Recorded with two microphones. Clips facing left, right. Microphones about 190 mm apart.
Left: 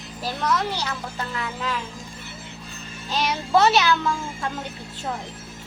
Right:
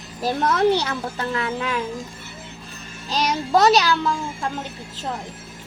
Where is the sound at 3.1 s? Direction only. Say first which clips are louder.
Right 1 dB; 40° right (ahead or behind).